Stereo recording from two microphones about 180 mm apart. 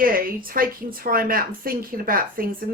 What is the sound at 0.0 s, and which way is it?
Speech, 50° right (ahead or behind).